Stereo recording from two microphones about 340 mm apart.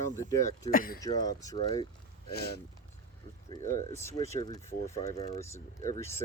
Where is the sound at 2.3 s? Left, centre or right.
Left.